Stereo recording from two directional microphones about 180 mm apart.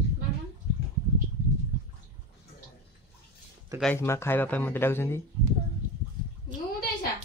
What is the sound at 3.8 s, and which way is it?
Speech, 15° left (ahead or behind).